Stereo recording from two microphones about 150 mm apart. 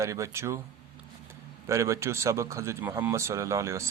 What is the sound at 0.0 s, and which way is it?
Speech, 20° right (ahead or behind).